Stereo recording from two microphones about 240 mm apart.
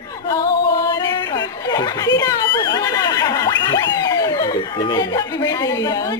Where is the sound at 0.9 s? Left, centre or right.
Centre.